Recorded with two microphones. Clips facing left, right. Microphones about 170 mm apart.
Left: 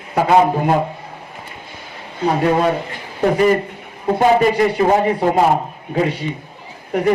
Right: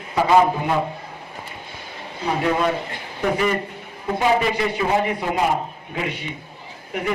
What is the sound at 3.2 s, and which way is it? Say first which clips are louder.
A man's voice: left 7 dB; 40° left (ahead or behind).